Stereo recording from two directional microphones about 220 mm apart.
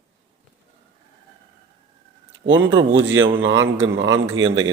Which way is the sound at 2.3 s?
60° right (ahead or behind).